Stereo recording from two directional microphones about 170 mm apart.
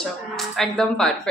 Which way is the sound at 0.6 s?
5° left (ahead or behind).